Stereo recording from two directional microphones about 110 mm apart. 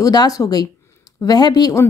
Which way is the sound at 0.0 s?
35° left (ahead or behind).